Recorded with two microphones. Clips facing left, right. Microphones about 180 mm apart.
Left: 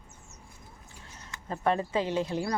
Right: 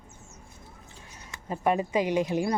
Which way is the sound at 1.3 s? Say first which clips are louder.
Right 2 dB; 10° right (ahead or behind).